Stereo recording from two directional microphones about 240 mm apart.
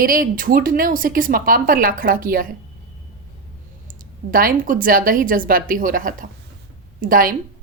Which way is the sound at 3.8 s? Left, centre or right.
Right.